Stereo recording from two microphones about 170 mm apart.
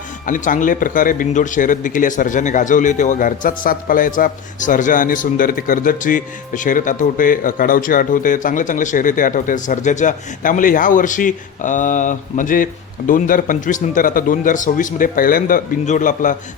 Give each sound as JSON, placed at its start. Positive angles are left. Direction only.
{"t": 0.3, "sound": "a man's voice", "side_deg": 50}